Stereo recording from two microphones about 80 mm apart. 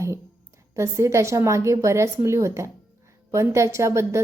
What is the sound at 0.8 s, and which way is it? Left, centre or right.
A woman's voice, right.